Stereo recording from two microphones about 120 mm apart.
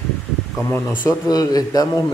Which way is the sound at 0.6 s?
15° left (ahead or behind).